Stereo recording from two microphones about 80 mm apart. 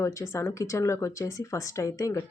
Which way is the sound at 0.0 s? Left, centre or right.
Left.